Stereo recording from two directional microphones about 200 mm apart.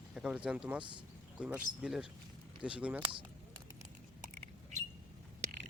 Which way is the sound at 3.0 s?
25° right (ahead or behind).